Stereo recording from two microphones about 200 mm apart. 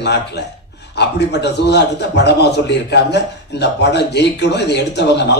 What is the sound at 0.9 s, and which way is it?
A man's voice, 55° left (ahead or behind).